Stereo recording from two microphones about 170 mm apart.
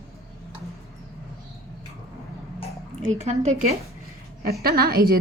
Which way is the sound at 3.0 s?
40° right (ahead or behind).